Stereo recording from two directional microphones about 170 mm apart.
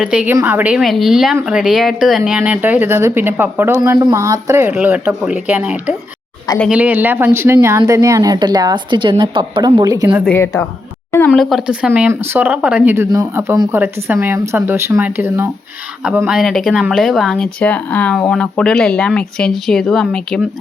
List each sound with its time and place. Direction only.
0.0 s a woman's voice: 5° right (ahead or behind); by 10.1 s 20° right (ahead or behind)
10.2 s a woman's voice: 15° left (ahead or behind)
11.3 s speech: centre (ahead or behind)